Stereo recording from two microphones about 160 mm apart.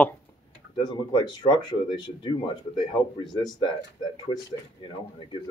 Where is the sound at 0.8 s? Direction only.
30° left (ahead or behind).